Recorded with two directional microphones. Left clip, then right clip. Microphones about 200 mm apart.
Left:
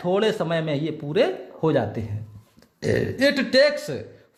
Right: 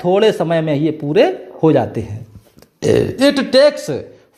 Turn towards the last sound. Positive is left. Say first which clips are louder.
# right 7 dB
turn(degrees=-20)  # may be behind; listen again after turning